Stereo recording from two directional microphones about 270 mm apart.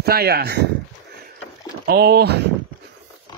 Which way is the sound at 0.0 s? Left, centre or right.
Right.